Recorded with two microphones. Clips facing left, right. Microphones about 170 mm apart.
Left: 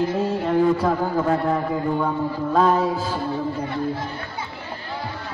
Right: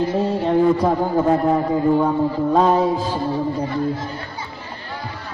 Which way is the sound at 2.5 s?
30° right (ahead or behind).